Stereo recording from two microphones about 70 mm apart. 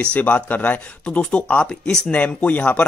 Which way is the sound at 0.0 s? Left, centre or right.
Left.